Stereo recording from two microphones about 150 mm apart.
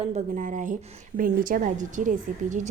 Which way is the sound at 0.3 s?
55° right (ahead or behind).